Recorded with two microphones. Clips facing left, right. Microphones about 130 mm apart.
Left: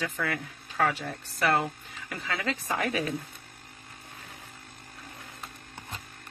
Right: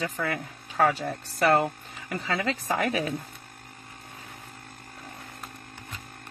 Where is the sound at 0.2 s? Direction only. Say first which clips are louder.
Right 2 dB; 40° right (ahead or behind).